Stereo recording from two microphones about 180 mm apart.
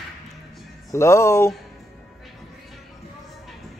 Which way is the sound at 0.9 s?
15° left (ahead or behind).